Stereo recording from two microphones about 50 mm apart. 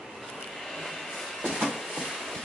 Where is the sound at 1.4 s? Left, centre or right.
Centre.